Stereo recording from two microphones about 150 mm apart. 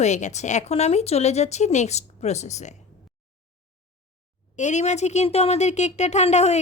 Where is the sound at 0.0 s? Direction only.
50° left (ahead or behind).